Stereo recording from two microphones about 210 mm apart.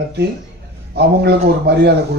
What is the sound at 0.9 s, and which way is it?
Speech, 50° right (ahead or behind).